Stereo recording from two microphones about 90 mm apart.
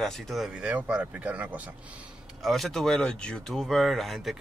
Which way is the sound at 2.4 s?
Centre (ahead or behind).